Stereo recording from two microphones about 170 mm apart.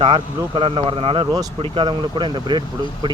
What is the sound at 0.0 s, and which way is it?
Speech, 35° right (ahead or behind).